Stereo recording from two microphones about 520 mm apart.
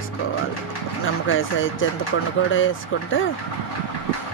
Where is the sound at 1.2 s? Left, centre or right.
Left.